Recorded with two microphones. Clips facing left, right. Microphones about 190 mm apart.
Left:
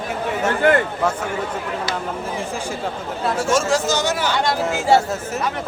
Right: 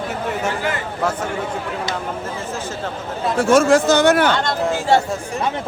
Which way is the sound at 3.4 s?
60° right (ahead or behind).